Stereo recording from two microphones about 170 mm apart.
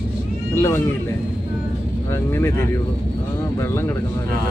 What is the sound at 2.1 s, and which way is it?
Speech, 15° left (ahead or behind).